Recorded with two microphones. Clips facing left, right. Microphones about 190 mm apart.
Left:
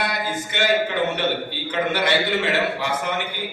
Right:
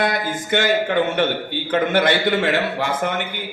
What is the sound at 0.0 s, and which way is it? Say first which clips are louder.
A man's voice: right 4 dB; 50° right (ahead or behind).